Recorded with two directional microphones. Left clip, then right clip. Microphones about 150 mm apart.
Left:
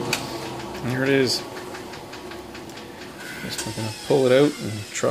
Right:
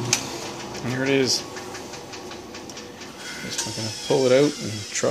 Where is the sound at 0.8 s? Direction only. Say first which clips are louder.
Left 1 dB; 15° left (ahead or behind).